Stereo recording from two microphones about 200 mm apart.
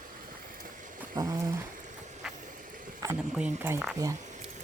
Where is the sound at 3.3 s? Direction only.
10° right (ahead or behind).